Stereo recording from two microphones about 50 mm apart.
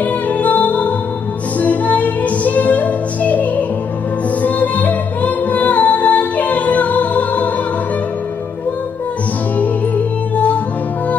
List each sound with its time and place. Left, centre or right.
0.0 s music: left
10.3 s music: left